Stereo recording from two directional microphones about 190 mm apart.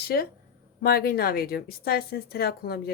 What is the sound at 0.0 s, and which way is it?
A woman's voice, 55° left (ahead or behind).